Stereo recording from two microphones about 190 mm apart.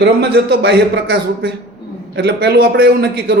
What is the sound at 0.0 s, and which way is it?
A man's voice, 60° right (ahead or behind).